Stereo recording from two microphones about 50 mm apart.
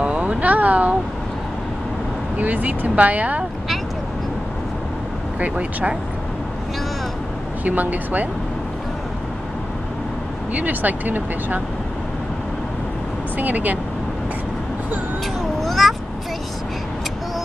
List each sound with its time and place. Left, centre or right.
0.0 s speech: right
2.3 s speech: right
5.4 s speech: right
7.6 s speech: right
10.5 s speech: right
13.4 s speech: right
15.6 s a sound: centre